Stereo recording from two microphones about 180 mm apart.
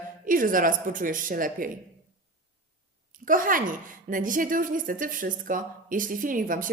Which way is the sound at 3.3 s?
50° right (ahead or behind).